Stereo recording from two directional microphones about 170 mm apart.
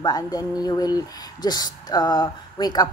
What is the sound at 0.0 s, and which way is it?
A woman's voice, 20° left (ahead or behind).